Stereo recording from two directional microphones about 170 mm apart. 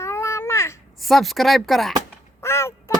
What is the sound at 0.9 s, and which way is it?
Speech, centre (ahead or behind).